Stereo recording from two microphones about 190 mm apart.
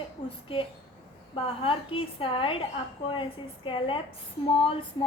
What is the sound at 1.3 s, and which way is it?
A woman's voice, 30° left (ahead or behind).